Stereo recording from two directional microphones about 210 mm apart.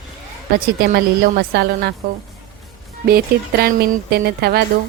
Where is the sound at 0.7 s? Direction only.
50° right (ahead or behind).